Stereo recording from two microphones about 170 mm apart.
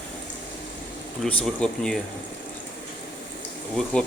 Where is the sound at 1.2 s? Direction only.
5° left (ahead or behind).